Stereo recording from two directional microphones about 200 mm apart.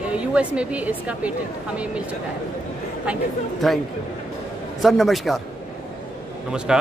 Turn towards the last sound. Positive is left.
turn(degrees=-5)  # may be behind; listen again after turning